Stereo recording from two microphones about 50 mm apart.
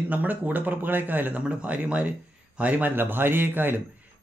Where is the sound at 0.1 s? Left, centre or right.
Right.